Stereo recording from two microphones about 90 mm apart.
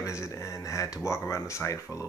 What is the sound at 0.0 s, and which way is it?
Speech, 35° left (ahead or behind).